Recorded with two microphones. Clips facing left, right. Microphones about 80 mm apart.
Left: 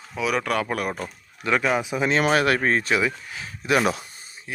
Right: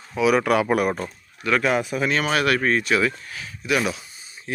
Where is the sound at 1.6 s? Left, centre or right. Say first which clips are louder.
Right 1 dB; centre.